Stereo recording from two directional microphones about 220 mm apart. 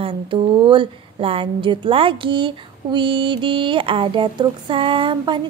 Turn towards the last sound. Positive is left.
turn(degrees=-20)  # may be behind; listen again after turning